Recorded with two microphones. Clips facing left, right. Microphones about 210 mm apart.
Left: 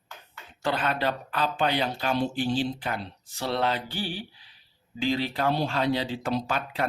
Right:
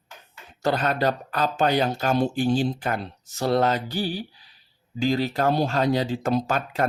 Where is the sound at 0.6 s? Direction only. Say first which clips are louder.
Right 4 dB; 40° right (ahead or behind).